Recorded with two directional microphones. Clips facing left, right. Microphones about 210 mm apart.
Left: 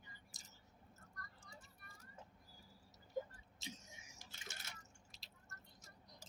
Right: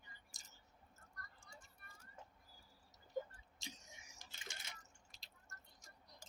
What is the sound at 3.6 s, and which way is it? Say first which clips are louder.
Tick-tock: left 3 dB; centre (ahead or behind).